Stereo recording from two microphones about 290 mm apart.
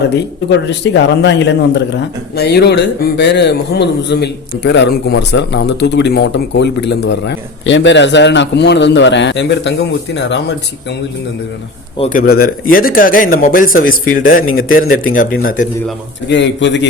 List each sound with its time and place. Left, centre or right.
0.7 s speech: left
11.9 s speech: left
14.7 s speech: left
15.1 s speech: left